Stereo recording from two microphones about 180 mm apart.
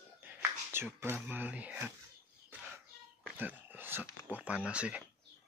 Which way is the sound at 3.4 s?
10° right (ahead or behind).